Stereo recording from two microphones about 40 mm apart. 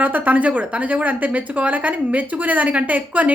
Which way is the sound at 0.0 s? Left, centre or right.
Right.